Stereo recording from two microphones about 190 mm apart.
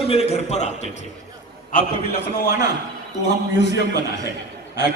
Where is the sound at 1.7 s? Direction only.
45° left (ahead or behind).